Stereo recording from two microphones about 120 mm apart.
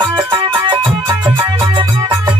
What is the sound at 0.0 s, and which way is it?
Music, 40° right (ahead or behind).